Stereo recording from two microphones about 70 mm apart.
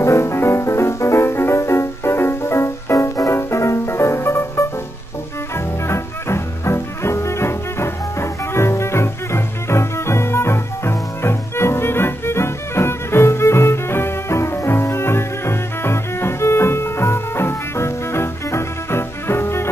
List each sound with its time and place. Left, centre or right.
0.0 s music: left
5.9 s music: left